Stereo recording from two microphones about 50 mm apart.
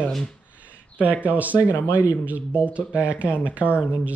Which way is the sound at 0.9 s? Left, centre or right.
Right.